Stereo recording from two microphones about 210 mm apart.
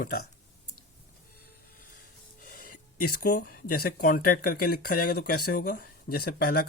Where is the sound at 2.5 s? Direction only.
40° left (ahead or behind).